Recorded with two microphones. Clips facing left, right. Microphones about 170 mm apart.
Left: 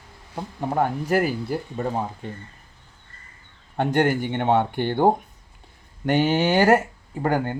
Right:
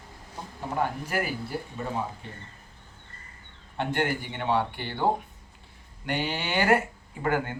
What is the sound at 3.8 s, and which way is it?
Speech, 45° left (ahead or behind).